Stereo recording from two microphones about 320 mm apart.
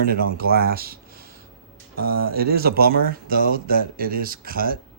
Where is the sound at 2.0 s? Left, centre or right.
Right.